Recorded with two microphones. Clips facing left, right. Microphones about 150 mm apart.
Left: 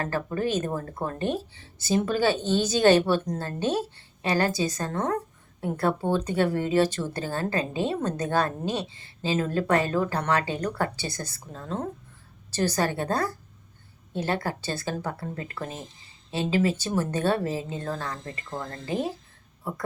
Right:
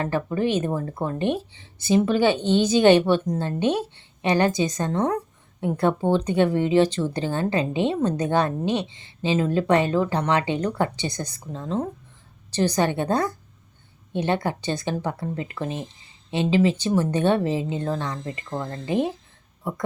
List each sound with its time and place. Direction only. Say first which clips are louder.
0.0 s a woman's voice: right 4 dB; 20° right (ahead or behind)